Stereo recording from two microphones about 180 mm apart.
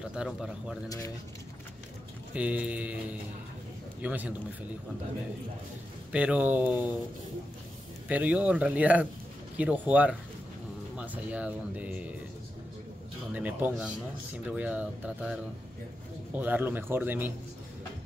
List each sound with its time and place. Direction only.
0.1 s speech: 5° right (ahead or behind)
0.8 s speech: 20° left (ahead or behind)
2.3 s speech: 5° right (ahead or behind)
6.1 s speech: 10° right (ahead or behind)
8.1 s speech: 10° right (ahead or behind)
13.3 s speech: 10° right (ahead or behind)
16.3 s speech: 10° right (ahead or behind)